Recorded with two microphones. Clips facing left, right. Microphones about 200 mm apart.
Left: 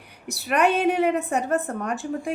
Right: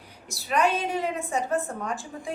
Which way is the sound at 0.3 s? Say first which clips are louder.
Left 3 dB; 65° left (ahead or behind).